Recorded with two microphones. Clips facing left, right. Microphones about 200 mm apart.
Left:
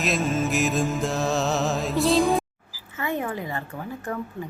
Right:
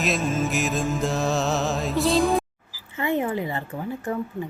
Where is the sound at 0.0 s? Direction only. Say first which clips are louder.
Even; centre (ahead or behind).